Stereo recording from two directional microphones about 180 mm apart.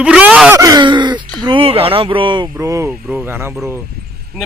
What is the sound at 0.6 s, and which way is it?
Speech, 25° right (ahead or behind).